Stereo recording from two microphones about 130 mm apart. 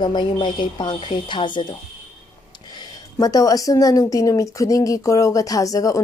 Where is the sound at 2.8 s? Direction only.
30° left (ahead or behind).